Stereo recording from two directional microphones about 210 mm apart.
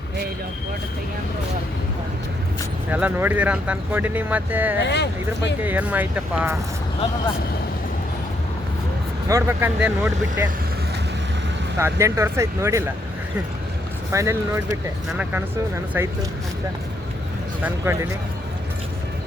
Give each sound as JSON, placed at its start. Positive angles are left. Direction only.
{"t": 2.9, "sound": "speech", "side_deg": -10}
{"t": 4.8, "sound": "speech", "side_deg": 55}
{"t": 5.6, "sound": "speech", "side_deg": -10}
{"t": 9.3, "sound": "speech", "side_deg": -10}
{"t": 11.8, "sound": "speech", "side_deg": -15}
{"t": 14.1, "sound": "speech", "side_deg": -15}
{"t": 17.6, "sound": "speech", "side_deg": -10}